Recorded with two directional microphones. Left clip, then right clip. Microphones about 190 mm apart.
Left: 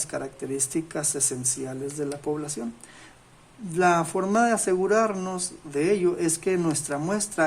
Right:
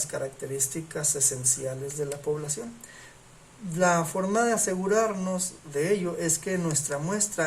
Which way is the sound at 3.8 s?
55° left (ahead or behind).